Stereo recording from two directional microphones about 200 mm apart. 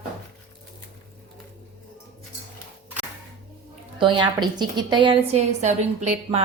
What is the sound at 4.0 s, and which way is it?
A woman's voice, 25° right (ahead or behind).